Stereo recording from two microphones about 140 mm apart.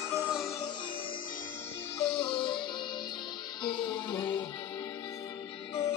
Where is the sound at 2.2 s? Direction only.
35° left (ahead or behind).